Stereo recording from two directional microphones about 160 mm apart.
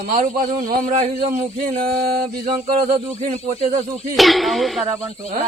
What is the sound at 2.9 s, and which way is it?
Speech, 45° right (ahead or behind).